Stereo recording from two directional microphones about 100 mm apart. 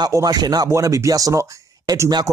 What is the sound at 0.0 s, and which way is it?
Speech, 40° right (ahead or behind).